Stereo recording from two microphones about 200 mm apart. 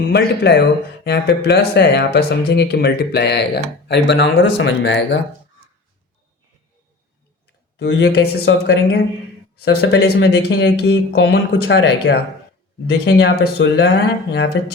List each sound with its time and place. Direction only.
0.1 s speech: 55° left (ahead or behind)
7.8 s speech: 60° left (ahead or behind)